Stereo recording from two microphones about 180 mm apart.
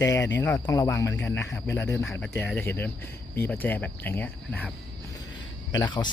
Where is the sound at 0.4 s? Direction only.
15° left (ahead or behind).